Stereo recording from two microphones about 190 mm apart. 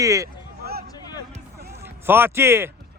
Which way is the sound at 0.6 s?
55° right (ahead or behind).